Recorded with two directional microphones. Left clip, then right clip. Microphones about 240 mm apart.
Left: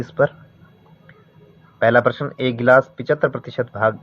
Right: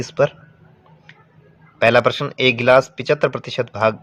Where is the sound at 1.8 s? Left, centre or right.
Right.